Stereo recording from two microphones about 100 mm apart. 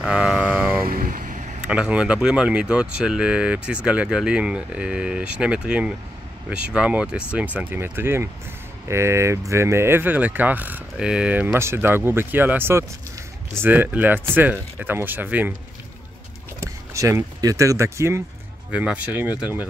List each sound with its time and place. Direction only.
0.1 s vehicle: 5° right (ahead or behind)
1.6 s speech: 10° right (ahead or behind)
16.5 s speech: 30° right (ahead or behind)
18.7 s speech: 10° right (ahead or behind)